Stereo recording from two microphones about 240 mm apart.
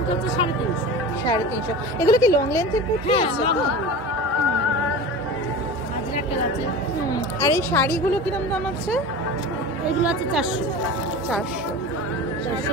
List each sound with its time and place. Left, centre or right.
2.0 s a woman's voice: centre
3.1 s speech: left
7.1 s a woman's voice: centre